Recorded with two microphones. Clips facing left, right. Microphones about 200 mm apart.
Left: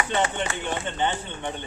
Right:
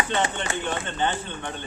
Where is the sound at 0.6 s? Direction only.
15° left (ahead or behind).